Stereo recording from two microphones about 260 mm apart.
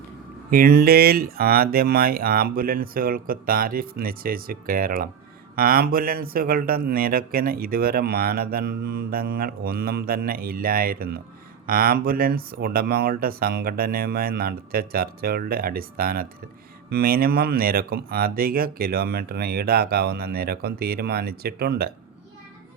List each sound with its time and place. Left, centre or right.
0.5 s speech: right